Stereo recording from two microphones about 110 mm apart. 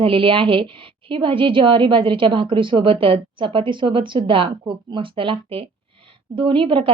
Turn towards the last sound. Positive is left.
turn(degrees=-50)  # may be behind; listen again after turning